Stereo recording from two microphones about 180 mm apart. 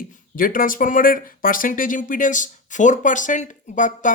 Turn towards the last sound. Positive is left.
turn(degrees=45)  # may be behind; listen again after turning